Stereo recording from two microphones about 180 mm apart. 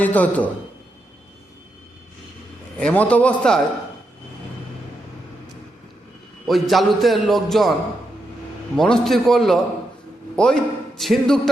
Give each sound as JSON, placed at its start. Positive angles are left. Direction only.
{"t": 0.0, "sound": "a man's voice", "side_deg": 10}
{"t": 2.7, "sound": "a man's voice", "side_deg": 5}
{"t": 6.5, "sound": "a man's voice", "side_deg": 0}